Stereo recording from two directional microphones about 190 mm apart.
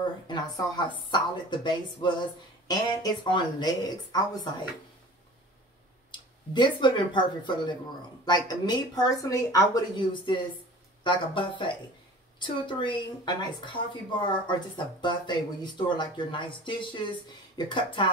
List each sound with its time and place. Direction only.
0.3 s speech: 25° left (ahead or behind)
6.1 s speech: 25° left (ahead or behind)